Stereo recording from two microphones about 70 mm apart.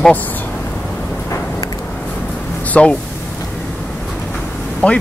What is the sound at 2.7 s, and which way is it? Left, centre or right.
Speech, centre.